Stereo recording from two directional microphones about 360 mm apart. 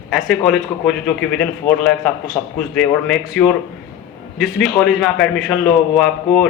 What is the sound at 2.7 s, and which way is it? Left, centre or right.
A man's voice, centre.